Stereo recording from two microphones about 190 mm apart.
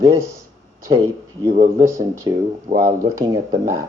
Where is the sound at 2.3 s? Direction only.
20° right (ahead or behind).